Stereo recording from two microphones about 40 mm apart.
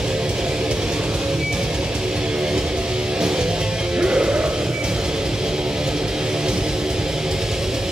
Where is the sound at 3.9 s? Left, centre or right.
Centre.